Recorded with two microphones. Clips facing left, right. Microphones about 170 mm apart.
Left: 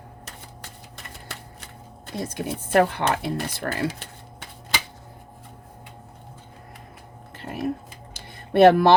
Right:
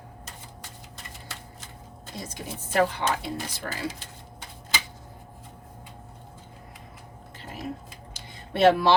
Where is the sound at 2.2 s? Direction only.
60° left (ahead or behind).